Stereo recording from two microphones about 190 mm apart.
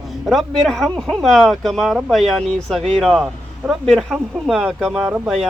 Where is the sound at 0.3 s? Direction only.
Centre (ahead or behind).